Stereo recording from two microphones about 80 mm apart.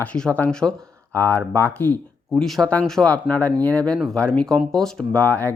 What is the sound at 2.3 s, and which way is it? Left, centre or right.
Speech, centre.